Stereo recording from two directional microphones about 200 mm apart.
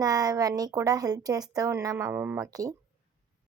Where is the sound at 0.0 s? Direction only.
20° right (ahead or behind).